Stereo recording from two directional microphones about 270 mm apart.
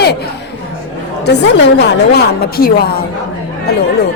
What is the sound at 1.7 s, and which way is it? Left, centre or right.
Speech, left.